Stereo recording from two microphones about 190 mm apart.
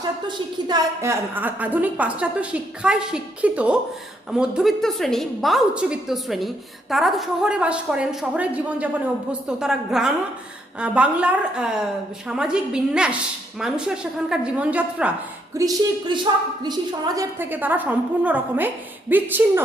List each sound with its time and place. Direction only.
0.3 s a woman's voice: 20° right (ahead or behind)
1.3 s a woman's voice: 10° right (ahead or behind)
15.5 s a woman's voice: 20° right (ahead or behind)
17.2 s a woman's voice: 10° right (ahead or behind)